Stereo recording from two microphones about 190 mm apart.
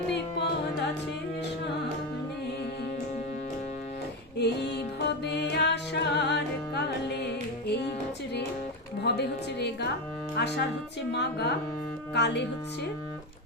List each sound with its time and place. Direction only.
0.1 s music: 65° left (ahead or behind)
4.4 s music: 60° left (ahead or behind)
9.0 s music: 60° left (ahead or behind)
10.3 s speech: 60° left (ahead or behind)
11.1 s music: 60° left (ahead or behind)